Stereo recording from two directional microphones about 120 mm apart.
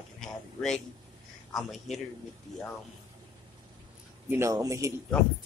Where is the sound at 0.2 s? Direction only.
5° left (ahead or behind).